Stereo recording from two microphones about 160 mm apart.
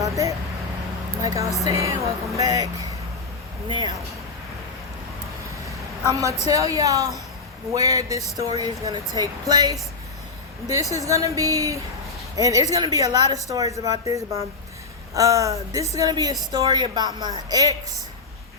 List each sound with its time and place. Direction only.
0.0 s a sound: 20° right (ahead or behind)
1.2 s speech: 20° right (ahead or behind)
3.7 s speech: 30° right (ahead or behind)
6.1 s speech: 25° right (ahead or behind)
10.9 s speech: 20° right (ahead or behind)